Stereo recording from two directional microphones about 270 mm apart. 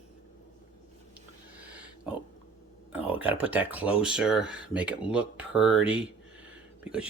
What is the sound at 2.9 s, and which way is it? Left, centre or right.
Speech, centre.